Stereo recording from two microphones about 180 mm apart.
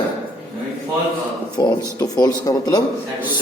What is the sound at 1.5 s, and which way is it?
A man's voice, 20° left (ahead or behind).